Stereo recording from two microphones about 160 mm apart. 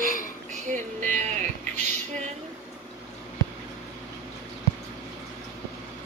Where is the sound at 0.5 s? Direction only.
50° right (ahead or behind).